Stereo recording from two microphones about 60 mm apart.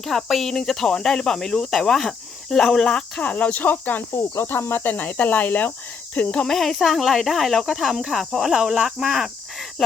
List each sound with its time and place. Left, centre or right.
0.0 s speech: centre; by 4.0 s left
4.1 s speech: left
6.3 s speech: centre